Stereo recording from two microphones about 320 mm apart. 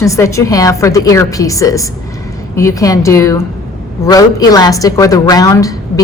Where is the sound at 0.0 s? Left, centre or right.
Centre.